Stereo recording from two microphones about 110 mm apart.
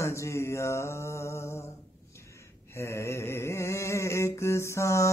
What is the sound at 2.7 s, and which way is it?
Mantra, 25° left (ahead or behind).